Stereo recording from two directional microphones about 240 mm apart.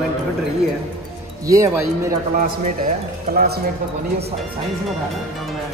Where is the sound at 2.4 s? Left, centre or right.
Right.